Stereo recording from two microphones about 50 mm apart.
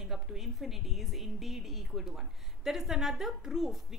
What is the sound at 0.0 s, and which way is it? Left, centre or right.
A woman's voice, centre.